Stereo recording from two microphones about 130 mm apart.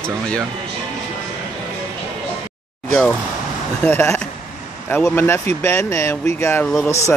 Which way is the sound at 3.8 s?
15° left (ahead or behind).